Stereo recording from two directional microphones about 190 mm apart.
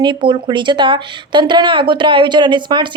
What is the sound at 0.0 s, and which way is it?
Speech, 25° right (ahead or behind).